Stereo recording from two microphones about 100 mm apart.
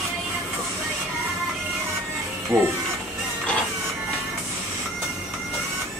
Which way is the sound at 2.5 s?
25° right (ahead or behind).